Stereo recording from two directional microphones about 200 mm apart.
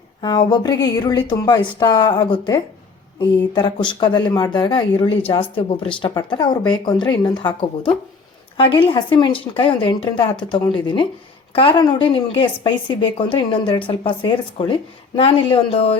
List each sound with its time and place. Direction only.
0.2 s a woman's voice: 20° left (ahead or behind)